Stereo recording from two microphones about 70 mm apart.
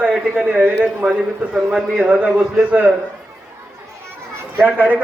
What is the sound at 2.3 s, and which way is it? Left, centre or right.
Speech, centre.